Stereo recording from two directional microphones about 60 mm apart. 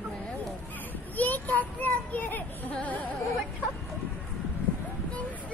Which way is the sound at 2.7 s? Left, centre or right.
Left.